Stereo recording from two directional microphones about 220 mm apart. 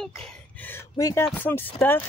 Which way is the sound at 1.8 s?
10° left (ahead or behind).